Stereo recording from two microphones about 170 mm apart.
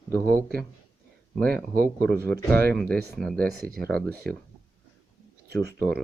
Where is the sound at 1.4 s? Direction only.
60° right (ahead or behind).